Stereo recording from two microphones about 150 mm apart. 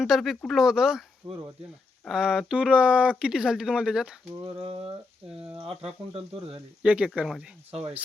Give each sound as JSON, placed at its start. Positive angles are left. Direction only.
{"t": 0.0, "sound": "speech", "side_deg": 0}
{"t": 1.2, "sound": "speech", "side_deg": -35}
{"t": 2.0, "sound": "speech", "side_deg": -5}
{"t": 4.4, "sound": "speech", "side_deg": -40}
{"t": 6.8, "sound": "speech", "side_deg": -5}